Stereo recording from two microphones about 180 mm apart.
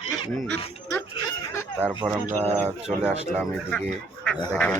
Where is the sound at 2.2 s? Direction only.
35° right (ahead or behind).